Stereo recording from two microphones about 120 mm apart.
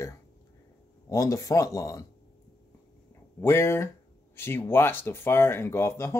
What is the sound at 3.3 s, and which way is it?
Speech, 20° left (ahead or behind).